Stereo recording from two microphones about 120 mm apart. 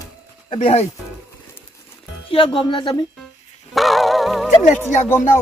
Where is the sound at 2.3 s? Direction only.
45° left (ahead or behind).